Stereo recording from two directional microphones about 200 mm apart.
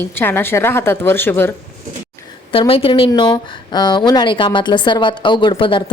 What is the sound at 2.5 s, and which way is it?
Speech, 25° left (ahead or behind).